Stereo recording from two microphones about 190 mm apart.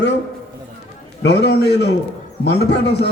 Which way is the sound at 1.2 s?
65° left (ahead or behind).